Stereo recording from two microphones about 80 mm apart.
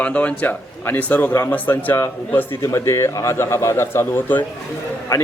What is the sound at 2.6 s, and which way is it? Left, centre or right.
A man's voice, left.